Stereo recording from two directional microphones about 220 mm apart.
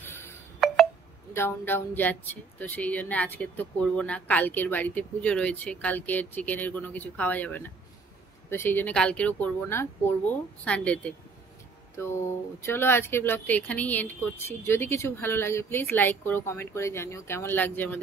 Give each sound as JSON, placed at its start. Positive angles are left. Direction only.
{"t": 1.3, "sound": "speech", "side_deg": 10}